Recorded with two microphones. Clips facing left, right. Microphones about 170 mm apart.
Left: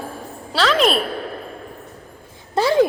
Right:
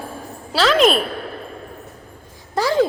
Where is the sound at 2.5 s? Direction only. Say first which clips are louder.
Left 2 dB; 20° left (ahead or behind).